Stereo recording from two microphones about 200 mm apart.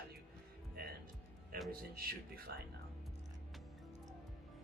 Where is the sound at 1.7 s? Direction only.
50° right (ahead or behind).